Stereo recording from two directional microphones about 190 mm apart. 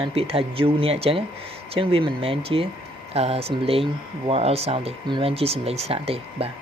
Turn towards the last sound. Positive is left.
turn(degrees=-30)  # may be behind; listen again after turning